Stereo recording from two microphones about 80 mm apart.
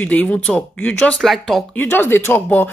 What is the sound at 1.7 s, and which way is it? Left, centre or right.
Speech, left.